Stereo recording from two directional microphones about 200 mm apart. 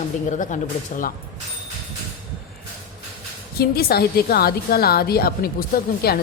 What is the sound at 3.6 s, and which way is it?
Speech, 50° left (ahead or behind).